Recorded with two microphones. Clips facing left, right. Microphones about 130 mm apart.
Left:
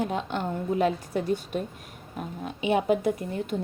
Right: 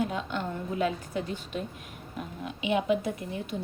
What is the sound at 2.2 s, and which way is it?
Speech, 40° left (ahead or behind).